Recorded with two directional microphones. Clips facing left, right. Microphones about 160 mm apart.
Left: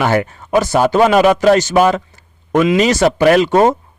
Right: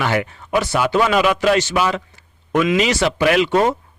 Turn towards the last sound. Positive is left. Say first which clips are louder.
# left 5 dB
turn(degrees=40)  # may be behind; listen again after turning